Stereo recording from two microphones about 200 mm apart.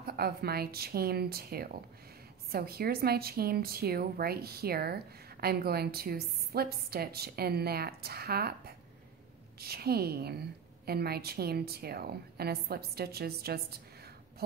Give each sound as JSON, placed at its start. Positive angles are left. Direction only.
{"t": 0.0, "sound": "a woman's voice", "side_deg": -50}